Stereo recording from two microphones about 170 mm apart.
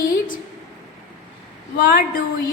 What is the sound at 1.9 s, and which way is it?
Speech, 55° left (ahead or behind).